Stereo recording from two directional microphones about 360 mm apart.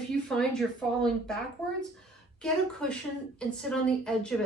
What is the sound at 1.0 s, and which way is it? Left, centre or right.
Speech, centre.